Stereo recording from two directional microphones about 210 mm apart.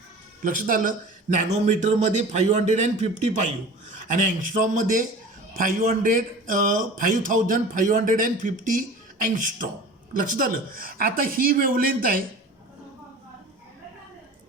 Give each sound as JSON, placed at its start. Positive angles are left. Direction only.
{"t": 0.4, "sound": "a man's voice", "side_deg": -40}